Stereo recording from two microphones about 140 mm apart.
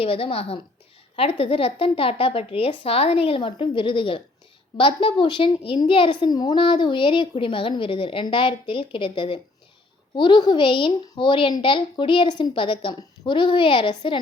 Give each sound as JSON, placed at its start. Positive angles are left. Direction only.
{"t": 0.0, "sound": "a woman's voice", "side_deg": 40}